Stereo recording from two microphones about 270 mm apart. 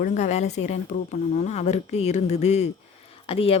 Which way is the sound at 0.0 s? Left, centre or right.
Left.